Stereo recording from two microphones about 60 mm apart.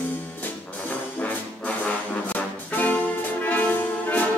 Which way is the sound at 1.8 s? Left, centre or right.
Left.